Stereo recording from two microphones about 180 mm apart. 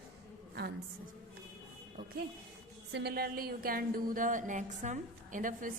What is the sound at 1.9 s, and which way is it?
Speech, 60° right (ahead or behind).